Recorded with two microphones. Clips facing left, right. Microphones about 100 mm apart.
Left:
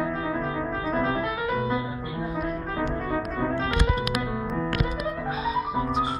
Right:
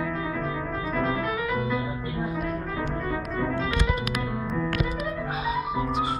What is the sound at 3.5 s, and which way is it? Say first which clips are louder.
Music: left 2 dB; 50° left (ahead or behind).